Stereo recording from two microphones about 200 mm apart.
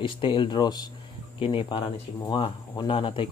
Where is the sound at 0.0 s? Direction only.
25° left (ahead or behind).